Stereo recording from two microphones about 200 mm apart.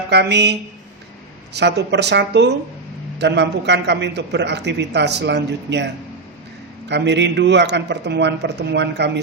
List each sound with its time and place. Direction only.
0.1 s a man's voice: 60° right (ahead or behind)
1.5 s a man's voice: 60° right (ahead or behind)